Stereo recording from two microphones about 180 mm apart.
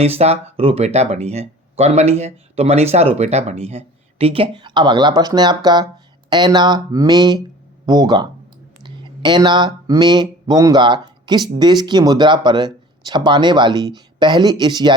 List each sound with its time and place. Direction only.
0.0 s speech: 35° right (ahead or behind)